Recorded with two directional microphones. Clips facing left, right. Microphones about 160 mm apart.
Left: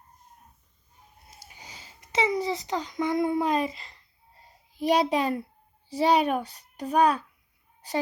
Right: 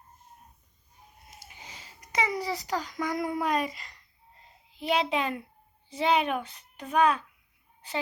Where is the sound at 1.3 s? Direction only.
35° left (ahead or behind).